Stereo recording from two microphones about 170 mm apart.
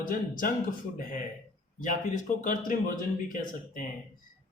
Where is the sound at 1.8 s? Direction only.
50° left (ahead or behind).